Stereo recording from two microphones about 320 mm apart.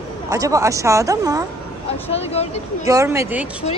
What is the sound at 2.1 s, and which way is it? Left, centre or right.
Speech, centre.